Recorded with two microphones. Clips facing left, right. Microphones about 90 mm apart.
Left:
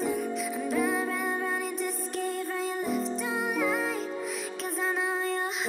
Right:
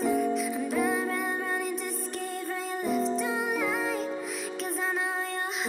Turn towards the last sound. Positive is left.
turn(degrees=0)  # may be behind; listen again after turning